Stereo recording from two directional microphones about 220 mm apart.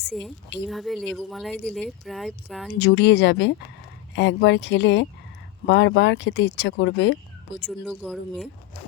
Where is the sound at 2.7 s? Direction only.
50° left (ahead or behind).